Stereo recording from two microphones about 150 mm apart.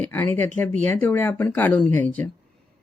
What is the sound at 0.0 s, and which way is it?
Speech, 10° left (ahead or behind).